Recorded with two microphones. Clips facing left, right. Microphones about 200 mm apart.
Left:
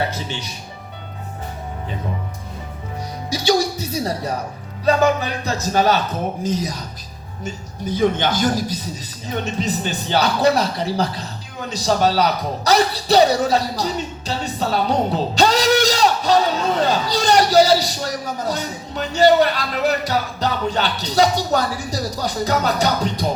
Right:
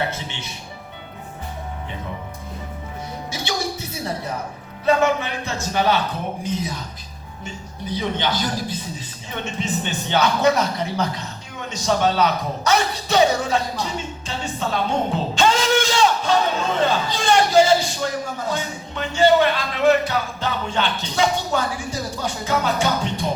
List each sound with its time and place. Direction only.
0.1 s speech: 35° left (ahead or behind)
3.2 s a man's voice: 35° left (ahead or behind)
11.7 s a sound: 35° left (ahead or behind)